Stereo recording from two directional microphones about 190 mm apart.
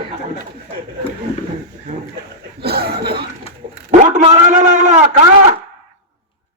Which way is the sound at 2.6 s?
55° right (ahead or behind).